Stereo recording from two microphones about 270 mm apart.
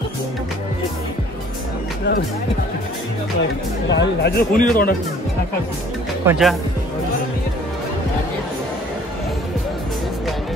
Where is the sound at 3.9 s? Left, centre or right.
Left.